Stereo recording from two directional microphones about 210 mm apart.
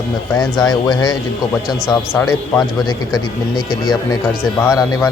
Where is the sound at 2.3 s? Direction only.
15° left (ahead or behind).